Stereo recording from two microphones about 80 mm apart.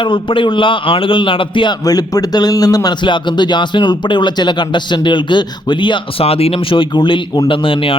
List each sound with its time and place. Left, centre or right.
0.0 s a man's voice: left
1.8 s a man's voice: left
3.0 s a man's voice: left